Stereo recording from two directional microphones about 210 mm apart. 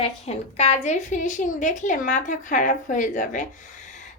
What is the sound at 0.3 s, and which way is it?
A woman's voice, 30° left (ahead or behind).